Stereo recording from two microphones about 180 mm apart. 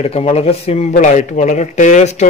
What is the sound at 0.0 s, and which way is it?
Speech, 35° left (ahead or behind).